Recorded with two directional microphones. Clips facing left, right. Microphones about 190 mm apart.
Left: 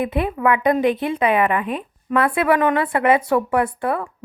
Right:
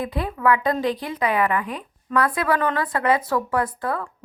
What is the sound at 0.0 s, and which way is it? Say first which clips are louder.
A woman's voice: left 3 dB; 20° left (ahead or behind).